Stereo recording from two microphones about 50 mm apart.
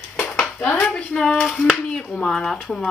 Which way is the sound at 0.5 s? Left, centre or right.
Left.